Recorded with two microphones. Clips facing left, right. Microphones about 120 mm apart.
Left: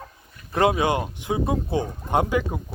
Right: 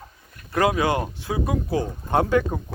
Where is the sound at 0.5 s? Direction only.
25° left (ahead or behind).